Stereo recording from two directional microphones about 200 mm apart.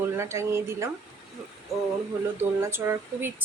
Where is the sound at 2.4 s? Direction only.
10° right (ahead or behind).